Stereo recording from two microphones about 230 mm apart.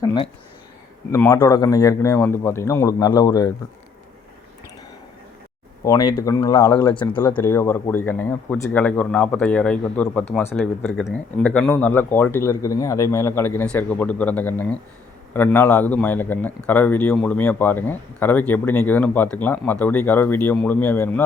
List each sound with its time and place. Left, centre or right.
0.0 s speech: centre
5.8 s speech: centre
7.2 s speech: centre